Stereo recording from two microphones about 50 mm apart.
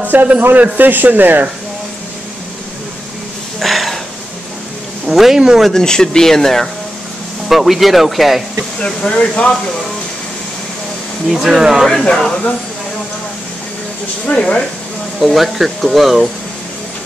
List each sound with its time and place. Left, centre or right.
0.1 s speech: right
3.5 s a sound: centre
5.0 s speech: centre
5.6 s speech: centre
7.4 s speech: centre
8.8 s speech: centre
11.2 s speech: centre
11.9 s speech: centre
14.2 s speech: left
15.1 s speech: centre